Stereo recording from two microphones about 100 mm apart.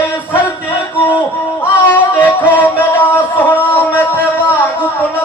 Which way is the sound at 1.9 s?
15° left (ahead or behind).